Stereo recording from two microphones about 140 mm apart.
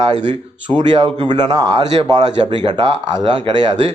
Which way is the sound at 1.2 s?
30° right (ahead or behind).